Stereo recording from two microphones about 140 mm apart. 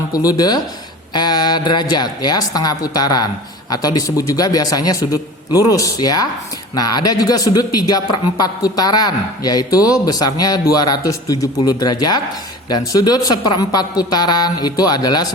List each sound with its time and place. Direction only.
0.1 s a man's voice: 25° left (ahead or behind)